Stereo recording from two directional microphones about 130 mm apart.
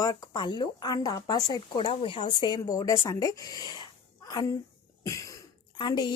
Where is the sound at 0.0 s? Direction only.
35° left (ahead or behind).